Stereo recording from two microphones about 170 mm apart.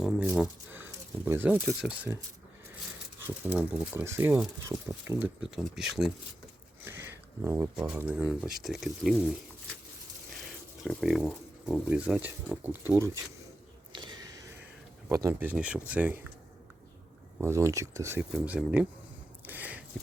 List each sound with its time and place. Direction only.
0.0 s speech: 5° right (ahead or behind)
3.2 s speech: 10° right (ahead or behind)
5.4 s speech: 5° right (ahead or behind)
6.8 s speech: 15° right (ahead or behind)
10.8 s speech: centre (ahead or behind)
13.9 s a sound: 25° right (ahead or behind)
15.1 s speech: 15° right (ahead or behind)
17.3 s speech: 15° right (ahead or behind)
19.5 s a sound: 10° right (ahead or behind)